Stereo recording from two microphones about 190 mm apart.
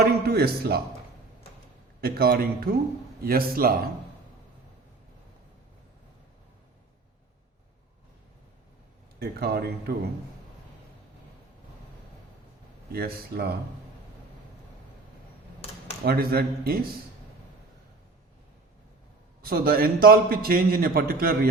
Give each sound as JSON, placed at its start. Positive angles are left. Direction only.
{"t": 0.0, "sound": "speech", "side_deg": -55}
{"t": 2.0, "sound": "a man's voice", "side_deg": -55}
{"t": 9.1, "sound": "speech", "side_deg": -55}
{"t": 12.9, "sound": "a man's voice", "side_deg": -55}
{"t": 16.0, "sound": "a man's voice", "side_deg": -55}
{"t": 19.4, "sound": "a man's voice", "side_deg": -50}